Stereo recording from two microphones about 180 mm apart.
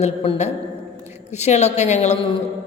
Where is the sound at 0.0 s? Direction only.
35° left (ahead or behind).